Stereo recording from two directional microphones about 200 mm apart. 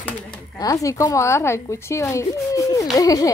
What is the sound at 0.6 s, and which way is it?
A woman's voice, 20° left (ahead or behind).